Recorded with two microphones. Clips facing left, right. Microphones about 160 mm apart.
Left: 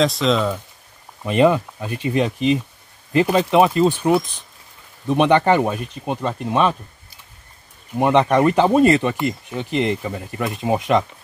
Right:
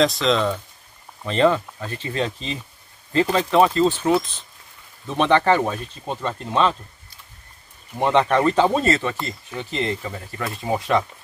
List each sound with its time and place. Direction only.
0.0 s speech: centre (ahead or behind)
8.0 s speech: 10° left (ahead or behind)